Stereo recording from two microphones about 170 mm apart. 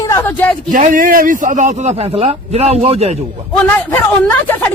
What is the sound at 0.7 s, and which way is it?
A man's voice, 50° right (ahead or behind).